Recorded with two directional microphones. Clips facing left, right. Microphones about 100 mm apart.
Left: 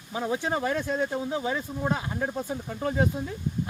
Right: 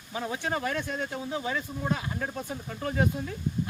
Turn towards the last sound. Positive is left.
turn(degrees=20)  # may be behind; listen again after turning